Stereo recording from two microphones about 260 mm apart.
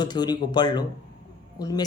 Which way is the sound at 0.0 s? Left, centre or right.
Centre.